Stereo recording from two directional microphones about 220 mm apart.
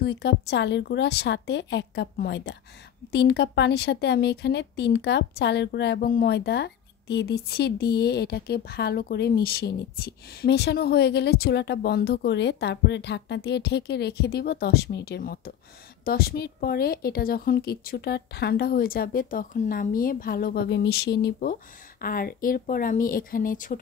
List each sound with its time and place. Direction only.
0.0 s a woman's voice: 50° left (ahead or behind)